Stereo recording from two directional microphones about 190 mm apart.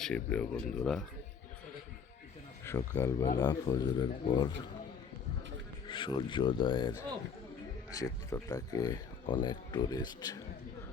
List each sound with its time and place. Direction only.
0.0 s speech: 5° left (ahead or behind)
2.6 s speech: 15° left (ahead or behind)
5.9 s speech: 25° left (ahead or behind)